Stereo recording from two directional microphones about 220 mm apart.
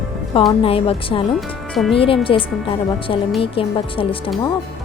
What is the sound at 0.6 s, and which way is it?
Speech, 25° left (ahead or behind).